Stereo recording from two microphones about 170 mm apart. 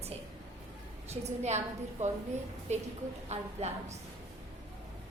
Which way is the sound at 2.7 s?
40° right (ahead or behind).